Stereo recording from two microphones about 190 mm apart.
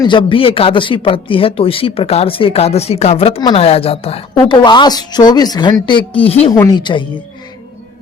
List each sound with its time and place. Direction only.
0.0 s speech: 25° left (ahead or behind)